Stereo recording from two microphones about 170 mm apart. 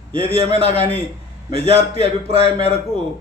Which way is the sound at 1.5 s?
35° right (ahead or behind).